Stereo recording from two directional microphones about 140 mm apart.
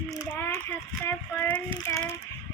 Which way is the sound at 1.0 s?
20° left (ahead or behind).